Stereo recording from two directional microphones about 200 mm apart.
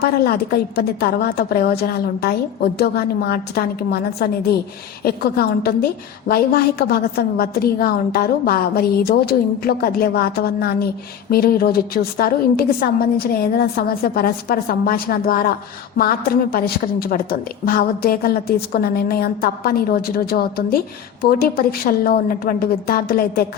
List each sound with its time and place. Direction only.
0.0 s a woman's voice: 50° left (ahead or behind)